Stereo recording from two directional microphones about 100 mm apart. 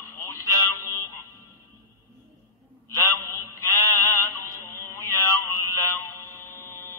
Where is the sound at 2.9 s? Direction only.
30° left (ahead or behind).